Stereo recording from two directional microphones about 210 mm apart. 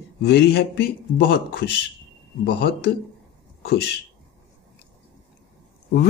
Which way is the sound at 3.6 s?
50° left (ahead or behind).